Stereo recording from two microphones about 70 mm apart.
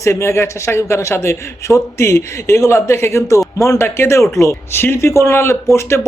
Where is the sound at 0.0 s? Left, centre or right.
Left.